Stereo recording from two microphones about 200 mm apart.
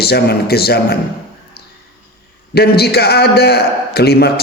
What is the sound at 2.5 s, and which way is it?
Speech, 55° left (ahead or behind).